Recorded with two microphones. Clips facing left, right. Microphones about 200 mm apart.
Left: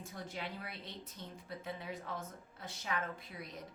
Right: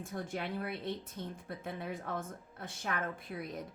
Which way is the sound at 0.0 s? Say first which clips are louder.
Right 6 dB; 50° right (ahead or behind).